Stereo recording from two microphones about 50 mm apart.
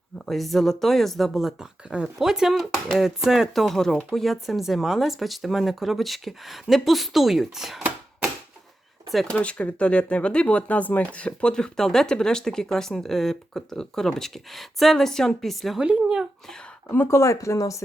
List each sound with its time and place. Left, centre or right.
0.3 s speech: centre
3.5 s speech: centre
9.3 s speech: left; by 15.8 s centre
15.8 s speech: centre
17.1 s speech: left